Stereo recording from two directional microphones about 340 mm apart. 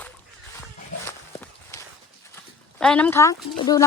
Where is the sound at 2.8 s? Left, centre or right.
Centre.